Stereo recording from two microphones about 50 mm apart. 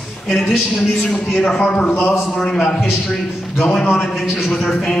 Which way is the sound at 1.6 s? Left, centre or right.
Left.